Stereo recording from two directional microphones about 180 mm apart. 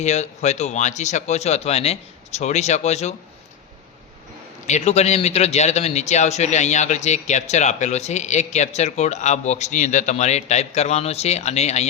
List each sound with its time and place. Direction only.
0.0 s a man's voice: 40° left (ahead or behind)
4.6 s a man's voice: 40° left (ahead or behind)